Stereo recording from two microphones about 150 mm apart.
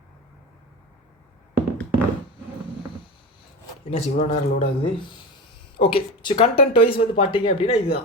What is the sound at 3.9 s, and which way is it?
A man's voice, 45° left (ahead or behind).